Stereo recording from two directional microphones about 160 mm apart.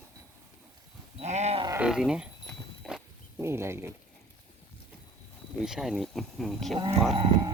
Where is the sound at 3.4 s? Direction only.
15° right (ahead or behind).